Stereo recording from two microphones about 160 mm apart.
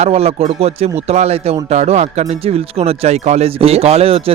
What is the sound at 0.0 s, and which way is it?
Speech, 40° right (ahead or behind).